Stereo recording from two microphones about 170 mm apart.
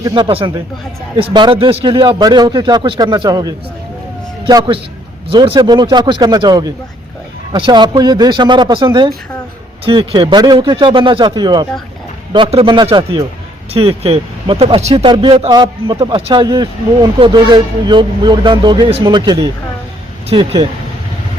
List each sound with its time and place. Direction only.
0.0 s a man's voice: 30° right (ahead or behind)